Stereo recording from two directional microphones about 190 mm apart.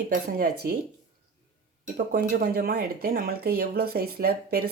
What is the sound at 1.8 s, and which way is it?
Speech, 45° right (ahead or behind).